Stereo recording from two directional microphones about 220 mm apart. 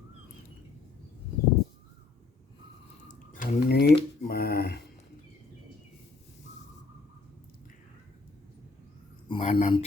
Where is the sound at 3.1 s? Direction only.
40° left (ahead or behind).